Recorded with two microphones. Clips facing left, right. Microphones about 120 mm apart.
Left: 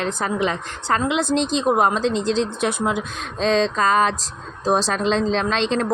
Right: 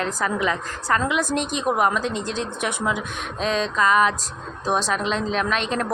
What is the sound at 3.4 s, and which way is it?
A woman's voice, 30° left (ahead or behind).